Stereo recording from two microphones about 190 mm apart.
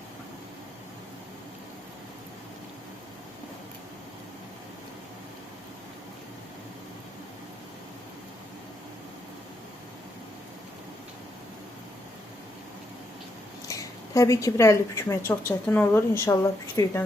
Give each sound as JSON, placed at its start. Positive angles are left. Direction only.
{"t": 13.7, "sound": "a woman's voice", "side_deg": 15}